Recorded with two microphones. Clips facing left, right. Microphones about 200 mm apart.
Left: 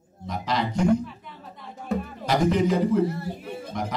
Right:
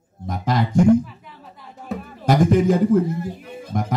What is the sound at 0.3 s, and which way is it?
Speech, 50° right (ahead or behind).